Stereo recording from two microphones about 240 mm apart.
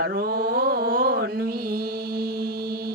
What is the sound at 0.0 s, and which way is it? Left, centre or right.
Mantra, right.